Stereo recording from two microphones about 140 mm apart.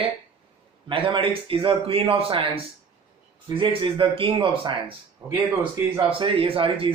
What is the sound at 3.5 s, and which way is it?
Speech, 40° right (ahead or behind).